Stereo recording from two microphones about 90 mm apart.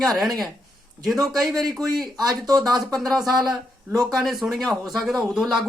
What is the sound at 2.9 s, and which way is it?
Speech, centre (ahead or behind).